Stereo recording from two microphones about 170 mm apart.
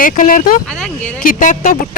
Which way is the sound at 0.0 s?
50° left (ahead or behind).